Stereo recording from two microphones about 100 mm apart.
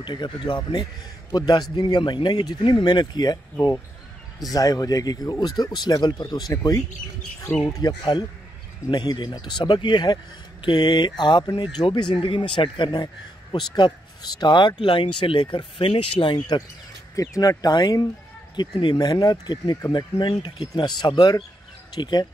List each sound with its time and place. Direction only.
0.0 s speech: 50° left (ahead or behind)
4.5 s speech: 35° left (ahead or behind); by 16.6 s 55° left (ahead or behind)
17.1 s speech: 35° left (ahead or behind)